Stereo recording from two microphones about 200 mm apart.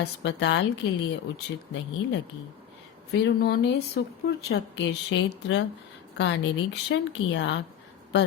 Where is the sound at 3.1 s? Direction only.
55° left (ahead or behind).